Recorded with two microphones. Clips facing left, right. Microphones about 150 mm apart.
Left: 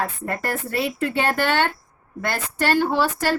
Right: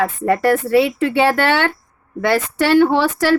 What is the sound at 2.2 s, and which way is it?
Speech, 90° right.